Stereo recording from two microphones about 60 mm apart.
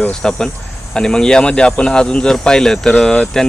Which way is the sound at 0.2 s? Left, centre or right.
Centre.